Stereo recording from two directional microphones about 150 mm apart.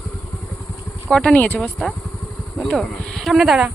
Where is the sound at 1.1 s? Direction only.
5° left (ahead or behind).